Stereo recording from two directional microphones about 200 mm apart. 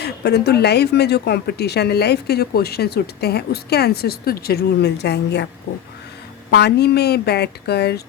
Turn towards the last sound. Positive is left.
turn(degrees=55)  # may be behind; listen again after turning